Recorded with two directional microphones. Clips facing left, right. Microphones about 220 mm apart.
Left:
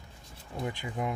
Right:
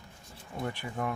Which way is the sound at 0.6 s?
20° left (ahead or behind).